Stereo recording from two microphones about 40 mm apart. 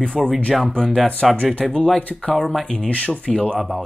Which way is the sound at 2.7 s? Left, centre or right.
Left.